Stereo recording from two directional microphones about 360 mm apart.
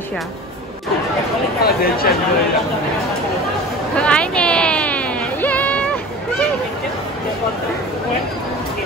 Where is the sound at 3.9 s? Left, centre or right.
Centre.